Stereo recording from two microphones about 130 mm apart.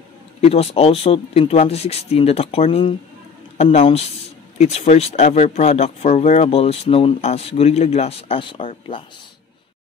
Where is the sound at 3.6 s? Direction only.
60° left (ahead or behind); by 9.1 s 45° left (ahead or behind).